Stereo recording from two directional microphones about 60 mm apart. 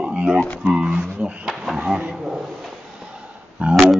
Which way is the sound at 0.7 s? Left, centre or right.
Centre.